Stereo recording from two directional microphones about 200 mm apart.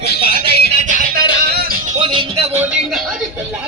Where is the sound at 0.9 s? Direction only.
45° right (ahead or behind).